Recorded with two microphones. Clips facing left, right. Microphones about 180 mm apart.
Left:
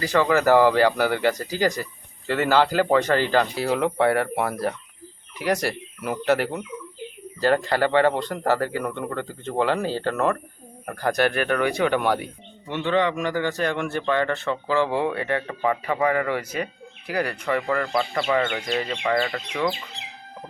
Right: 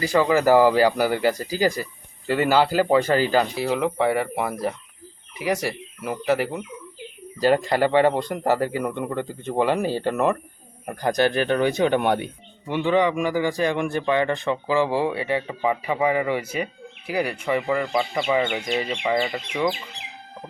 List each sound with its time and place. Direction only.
0.0 s speech: 10° right (ahead or behind)
12.6 s speech: 10° right (ahead or behind)